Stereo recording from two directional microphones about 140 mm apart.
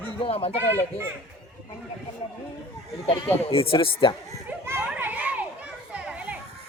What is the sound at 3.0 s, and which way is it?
Speech, 40° left (ahead or behind).